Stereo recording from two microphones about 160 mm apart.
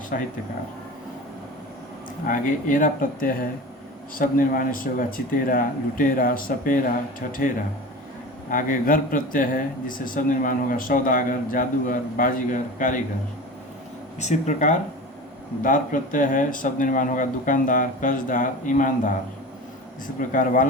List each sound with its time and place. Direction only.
0.1 s speech: 60° left (ahead or behind)
2.2 s speech: 55° left (ahead or behind)
14.2 s speech: 45° left (ahead or behind)
20.1 s speech: 55° left (ahead or behind)